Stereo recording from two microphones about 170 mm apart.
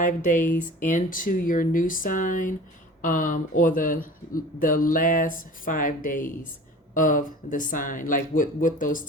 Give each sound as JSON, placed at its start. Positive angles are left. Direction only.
{"t": 0.0, "sound": "speech", "side_deg": 50}